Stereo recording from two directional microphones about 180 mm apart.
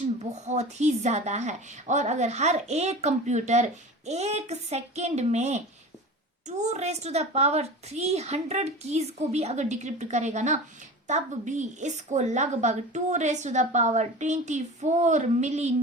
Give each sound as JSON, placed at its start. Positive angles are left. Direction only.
{"t": 0.0, "sound": "speech", "side_deg": -40}